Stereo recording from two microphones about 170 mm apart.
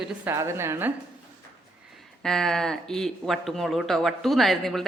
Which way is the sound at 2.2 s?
5° left (ahead or behind).